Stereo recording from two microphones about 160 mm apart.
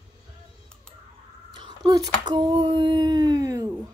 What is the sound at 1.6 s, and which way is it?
Speech, 25° right (ahead or behind).